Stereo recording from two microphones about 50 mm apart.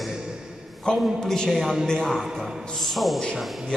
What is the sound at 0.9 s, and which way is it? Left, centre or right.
A man's voice, centre.